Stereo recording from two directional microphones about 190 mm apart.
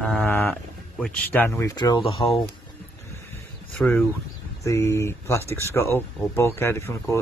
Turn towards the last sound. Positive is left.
turn(degrees=15)  # may be behind; listen again after turning